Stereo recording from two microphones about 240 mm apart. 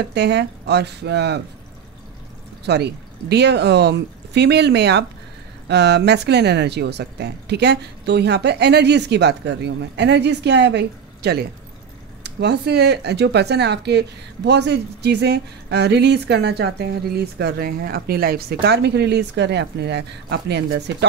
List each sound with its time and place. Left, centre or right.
0.1 s speech: right
2.6 s speech: right